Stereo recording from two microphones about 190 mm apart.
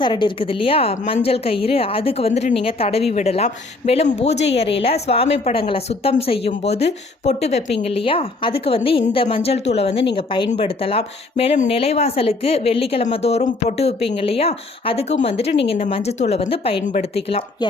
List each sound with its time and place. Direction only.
0.0 s a woman's voice: 25° left (ahead or behind)